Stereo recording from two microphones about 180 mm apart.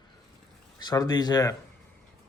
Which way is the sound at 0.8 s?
20° left (ahead or behind).